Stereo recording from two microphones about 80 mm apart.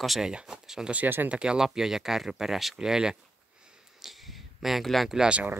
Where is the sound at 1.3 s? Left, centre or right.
Centre.